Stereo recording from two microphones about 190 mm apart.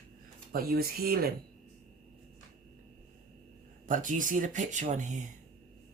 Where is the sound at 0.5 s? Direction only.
50° right (ahead or behind).